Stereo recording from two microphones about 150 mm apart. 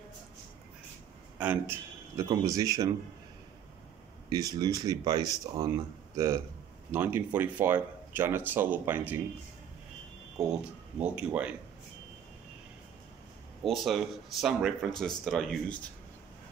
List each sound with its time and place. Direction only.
1.4 s a man's voice: 15° right (ahead or behind)
4.3 s speech: 25° right (ahead or behind)
10.4 s speech: 5° right (ahead or behind)
13.7 s speech: centre (ahead or behind)